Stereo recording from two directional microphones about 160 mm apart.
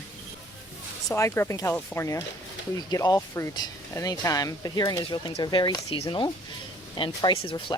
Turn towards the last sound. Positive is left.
turn(degrees=30)  # may be behind; listen again after turning